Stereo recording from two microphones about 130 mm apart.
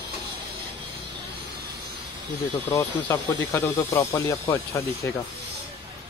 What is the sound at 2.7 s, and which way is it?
Speech, 20° left (ahead or behind).